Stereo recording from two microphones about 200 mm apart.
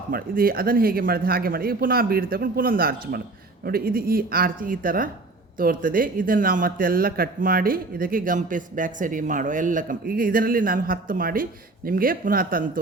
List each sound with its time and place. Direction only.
0.1 s a man's voice: 45° right (ahead or behind)